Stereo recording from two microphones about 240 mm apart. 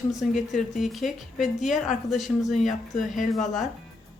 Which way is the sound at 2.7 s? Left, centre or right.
Left.